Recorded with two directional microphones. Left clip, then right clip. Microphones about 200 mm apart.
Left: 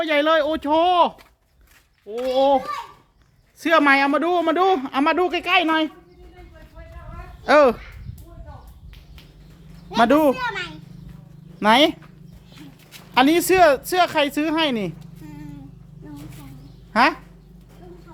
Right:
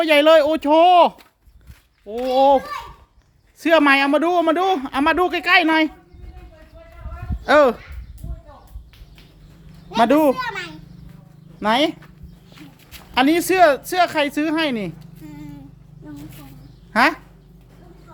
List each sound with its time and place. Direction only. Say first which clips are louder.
0.0 s speech: right 5 dB; 15° right (ahead or behind)
2.3 s speech: right 3 dB; 15° right (ahead or behind)
3.6 s a man's voice: right 1 dB; centre (ahead or behind)
7.4 s a man's voice: right 1 dB; 5° left (ahead or behind)
9.9 s a man's voice: right 1 dB; centre (ahead or behind)
10.3 s speech: even; 10° right (ahead or behind)
11.6 s speech: left 3 dB; 20° left (ahead or behind)
13.1 s speech: even; 10° left (ahead or behind)
16.9 s speech: right 1 dB; centre (ahead or behind)